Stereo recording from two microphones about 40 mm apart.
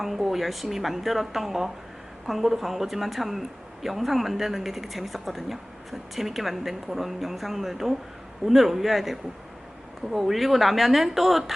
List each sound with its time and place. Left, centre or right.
0.0 s a woman's voice: centre